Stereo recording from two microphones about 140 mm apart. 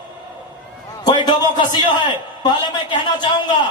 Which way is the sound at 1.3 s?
30° left (ahead or behind).